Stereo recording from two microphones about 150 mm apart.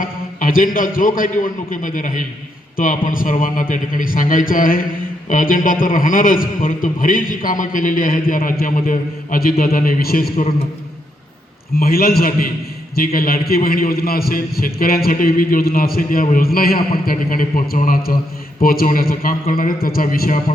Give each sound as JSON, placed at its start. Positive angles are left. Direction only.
{"t": 0.0, "sound": "a man's voice", "side_deg": 65}
{"t": 11.8, "sound": "a man's voice", "side_deg": 85}